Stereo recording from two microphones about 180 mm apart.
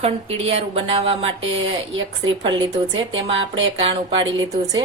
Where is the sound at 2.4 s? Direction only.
25° right (ahead or behind).